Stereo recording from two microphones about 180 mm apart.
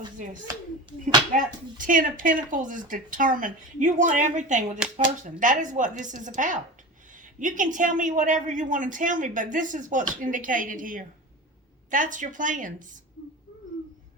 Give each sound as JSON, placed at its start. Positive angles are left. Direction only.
{"t": 1.3, "sound": "speech", "side_deg": -50}